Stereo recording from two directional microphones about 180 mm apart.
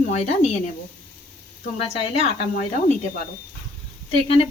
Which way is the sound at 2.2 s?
40° left (ahead or behind).